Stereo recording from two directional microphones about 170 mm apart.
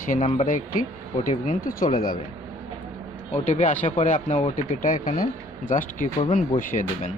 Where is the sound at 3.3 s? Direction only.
45° left (ahead or behind).